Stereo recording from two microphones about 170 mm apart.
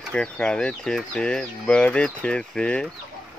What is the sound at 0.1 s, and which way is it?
Speech, 5° left (ahead or behind).